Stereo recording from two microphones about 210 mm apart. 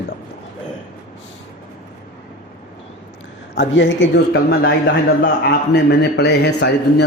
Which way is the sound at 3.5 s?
55° left (ahead or behind).